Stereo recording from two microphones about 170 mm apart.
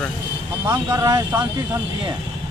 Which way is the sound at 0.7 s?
15° right (ahead or behind).